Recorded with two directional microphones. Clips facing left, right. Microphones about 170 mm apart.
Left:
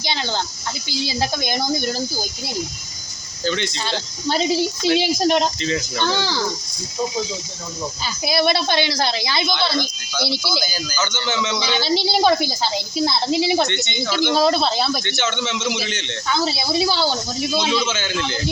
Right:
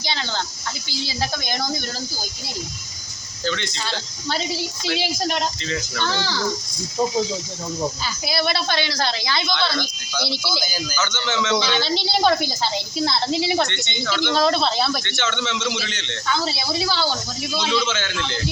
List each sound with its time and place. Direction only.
0.0 s a woman's voice: 15° left (ahead or behind)
3.4 s a woman's voice: 20° left (ahead or behind)
8.0 s a woman's voice: 15° left (ahead or behind)
10.6 s speech: 15° right (ahead or behind)
11.1 s a man's voice: 5° left (ahead or behind); by 17.8 s 20° left (ahead or behind)
17.8 s a woman's voice: 10° left (ahead or behind)